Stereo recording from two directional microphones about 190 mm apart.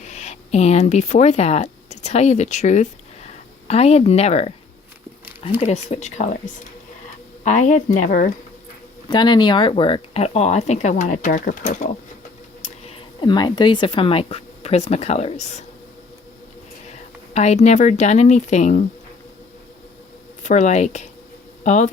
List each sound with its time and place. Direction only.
0.0 s speech: 35° left (ahead or behind)
5.5 s speech: 35° left (ahead or behind)
9.0 s speech: 25° left (ahead or behind)
17.3 s speech: 35° left (ahead or behind)
20.4 s speech: 40° left (ahead or behind)